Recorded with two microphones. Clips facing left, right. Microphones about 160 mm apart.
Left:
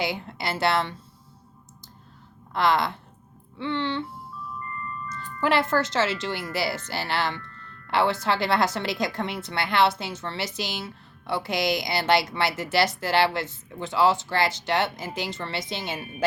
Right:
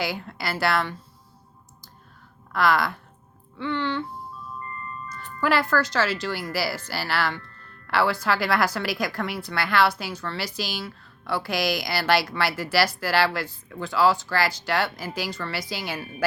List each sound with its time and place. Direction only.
0.0 s a woman's voice: 20° left (ahead or behind)
2.5 s a woman's voice: 20° left (ahead or behind)
5.4 s a woman's voice: 20° left (ahead or behind)